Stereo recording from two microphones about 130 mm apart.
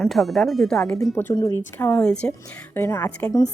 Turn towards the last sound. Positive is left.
turn(degrees=20)  # may be behind; listen again after turning